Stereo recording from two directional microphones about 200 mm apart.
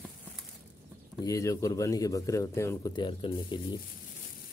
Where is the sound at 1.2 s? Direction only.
15° left (ahead or behind).